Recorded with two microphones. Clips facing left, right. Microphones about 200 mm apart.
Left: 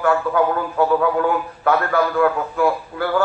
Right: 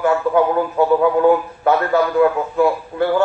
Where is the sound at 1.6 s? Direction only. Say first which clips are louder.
Right 2 dB; 20° right (ahead or behind).